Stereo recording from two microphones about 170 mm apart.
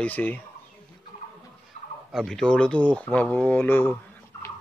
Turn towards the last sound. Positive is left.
turn(degrees=10)  # may be behind; listen again after turning